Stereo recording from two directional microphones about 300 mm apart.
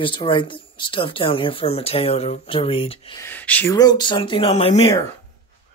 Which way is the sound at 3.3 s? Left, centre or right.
Centre.